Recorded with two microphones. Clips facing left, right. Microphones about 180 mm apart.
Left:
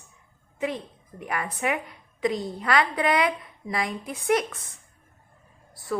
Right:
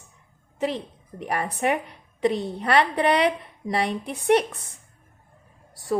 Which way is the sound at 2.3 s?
65° right (ahead or behind).